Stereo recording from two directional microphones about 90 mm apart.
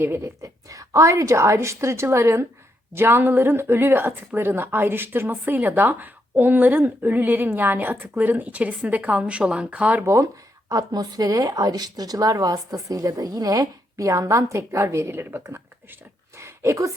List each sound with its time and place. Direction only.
0.0 s speech: 30° right (ahead or behind)
10.7 s speech: 45° right (ahead or behind); by 16.0 s 30° right (ahead or behind)
16.4 s a sound: 35° right (ahead or behind)